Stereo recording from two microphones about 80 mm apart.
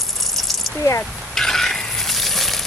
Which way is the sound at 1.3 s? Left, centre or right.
Centre.